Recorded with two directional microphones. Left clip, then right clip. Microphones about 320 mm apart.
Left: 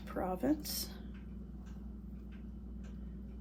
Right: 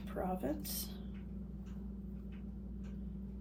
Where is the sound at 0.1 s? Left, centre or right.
Centre.